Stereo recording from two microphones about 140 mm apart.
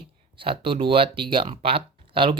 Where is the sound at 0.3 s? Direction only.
40° right (ahead or behind).